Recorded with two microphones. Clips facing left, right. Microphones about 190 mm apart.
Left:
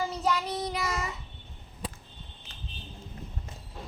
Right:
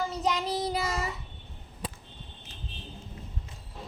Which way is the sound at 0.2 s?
20° right (ahead or behind).